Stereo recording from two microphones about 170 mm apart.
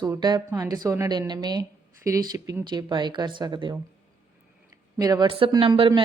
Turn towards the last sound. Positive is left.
turn(degrees=-30)  # may be behind; listen again after turning